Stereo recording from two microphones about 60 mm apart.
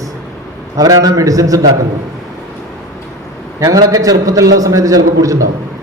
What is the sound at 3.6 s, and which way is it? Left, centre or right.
A man's voice, right.